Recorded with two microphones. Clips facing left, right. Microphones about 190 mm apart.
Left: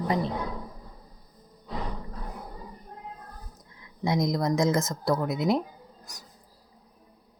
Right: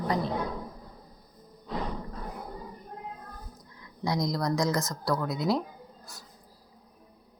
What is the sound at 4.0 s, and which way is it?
Speech, 20° left (ahead or behind).